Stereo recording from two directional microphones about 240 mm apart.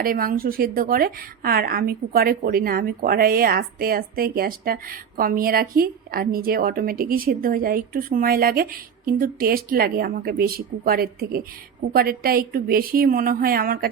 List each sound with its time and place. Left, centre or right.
0.0 s a woman's voice: right